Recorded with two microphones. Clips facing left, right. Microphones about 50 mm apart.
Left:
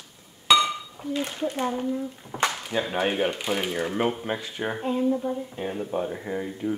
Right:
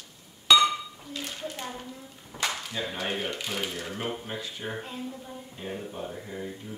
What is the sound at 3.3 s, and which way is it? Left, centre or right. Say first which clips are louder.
Speech: left 5 dB; left.